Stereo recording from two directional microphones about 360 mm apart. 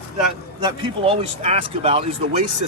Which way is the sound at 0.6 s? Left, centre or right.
Centre.